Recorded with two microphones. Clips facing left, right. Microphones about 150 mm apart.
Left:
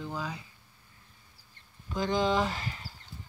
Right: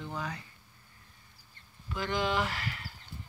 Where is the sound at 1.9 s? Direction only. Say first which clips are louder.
Left 4 dB; 20° left (ahead or behind).